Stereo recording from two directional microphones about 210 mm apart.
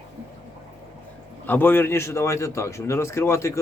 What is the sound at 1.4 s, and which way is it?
A man's voice, 10° left (ahead or behind).